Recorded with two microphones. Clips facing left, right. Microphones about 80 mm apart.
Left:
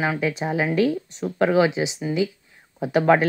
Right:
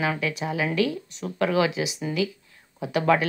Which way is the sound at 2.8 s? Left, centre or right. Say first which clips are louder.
Left 4 dB; left.